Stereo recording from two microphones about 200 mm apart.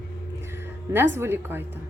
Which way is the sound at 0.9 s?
10° right (ahead or behind).